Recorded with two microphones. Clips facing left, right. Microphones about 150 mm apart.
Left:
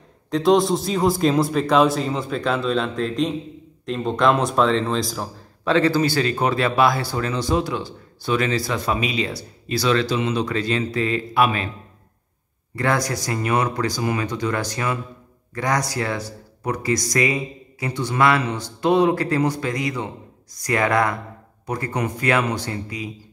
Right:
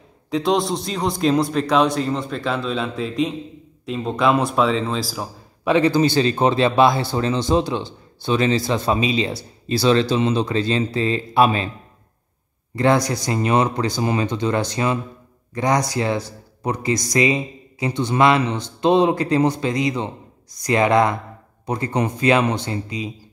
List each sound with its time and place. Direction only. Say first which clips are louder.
0.3 s a man's voice: left 3 dB; centre (ahead or behind); by 11.7 s 30° right (ahead or behind)
12.7 s speech: right 4 dB; 20° right (ahead or behind)